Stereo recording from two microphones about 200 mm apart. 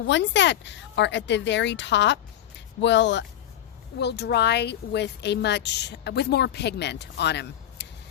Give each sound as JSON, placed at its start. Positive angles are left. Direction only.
{"t": 0.1, "sound": "speech", "side_deg": 60}